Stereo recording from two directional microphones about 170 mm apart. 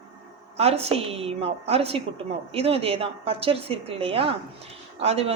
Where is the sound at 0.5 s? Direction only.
35° right (ahead or behind).